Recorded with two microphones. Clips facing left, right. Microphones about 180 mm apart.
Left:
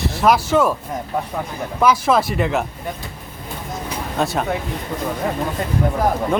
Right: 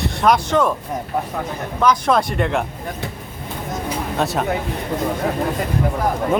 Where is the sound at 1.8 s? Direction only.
5° left (ahead or behind).